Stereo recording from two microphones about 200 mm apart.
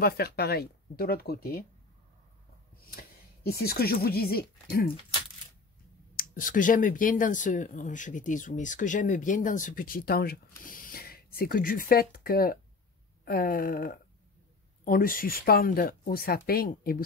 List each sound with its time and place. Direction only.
0.0 s speech: 50° left (ahead or behind)
2.9 s speech: 50° left (ahead or behind)
6.1 s speech: 45° left (ahead or behind)